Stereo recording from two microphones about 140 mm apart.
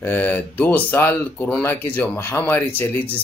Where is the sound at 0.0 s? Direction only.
15° left (ahead or behind).